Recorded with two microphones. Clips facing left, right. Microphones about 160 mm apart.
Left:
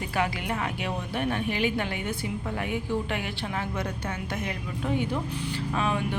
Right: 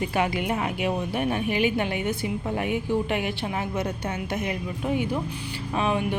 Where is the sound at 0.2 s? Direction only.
20° right (ahead or behind).